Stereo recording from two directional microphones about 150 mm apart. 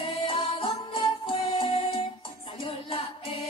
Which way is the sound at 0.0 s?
35° left (ahead or behind).